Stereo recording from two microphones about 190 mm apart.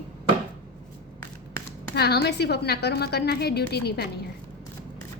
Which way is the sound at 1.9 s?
60° left (ahead or behind).